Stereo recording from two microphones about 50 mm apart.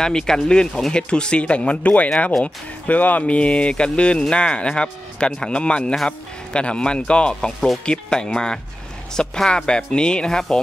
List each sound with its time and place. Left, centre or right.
0.0 s speech: centre